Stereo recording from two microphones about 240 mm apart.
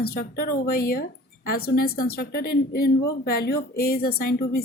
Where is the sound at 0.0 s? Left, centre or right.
Left.